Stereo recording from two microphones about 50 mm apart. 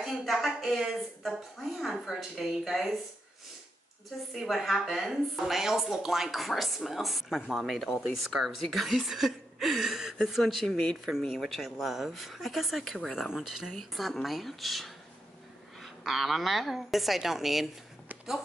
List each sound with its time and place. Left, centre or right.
0.1 s a woman's voice: centre
4.4 s a woman's voice: centre